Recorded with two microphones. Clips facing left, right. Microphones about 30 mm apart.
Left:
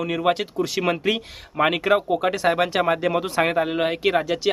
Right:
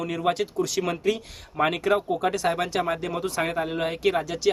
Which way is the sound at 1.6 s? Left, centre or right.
Left.